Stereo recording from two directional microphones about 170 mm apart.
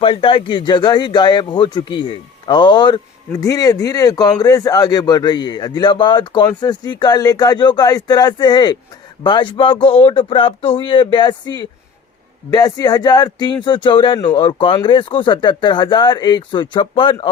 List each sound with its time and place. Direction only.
0.0 s speech: 30° left (ahead or behind)